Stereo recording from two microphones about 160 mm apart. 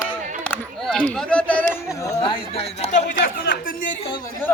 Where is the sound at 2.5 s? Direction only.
40° left (ahead or behind); by 3.9 s 60° left (ahead or behind).